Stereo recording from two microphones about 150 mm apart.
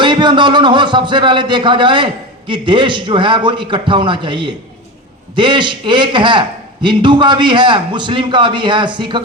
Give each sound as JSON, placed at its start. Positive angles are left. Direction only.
{"t": 0.0, "sound": "a man's voice", "side_deg": -30}